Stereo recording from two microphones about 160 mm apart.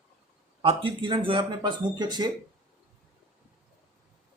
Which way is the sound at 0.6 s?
35° right (ahead or behind).